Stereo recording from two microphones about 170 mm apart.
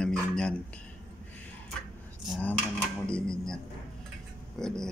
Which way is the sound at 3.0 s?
5° left (ahead or behind).